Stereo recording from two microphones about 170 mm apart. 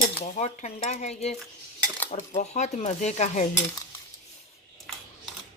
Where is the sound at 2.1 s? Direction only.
45° left (ahead or behind).